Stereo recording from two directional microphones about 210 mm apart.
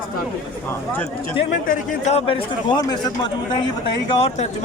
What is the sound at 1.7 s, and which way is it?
A man's voice, 30° left (ahead or behind).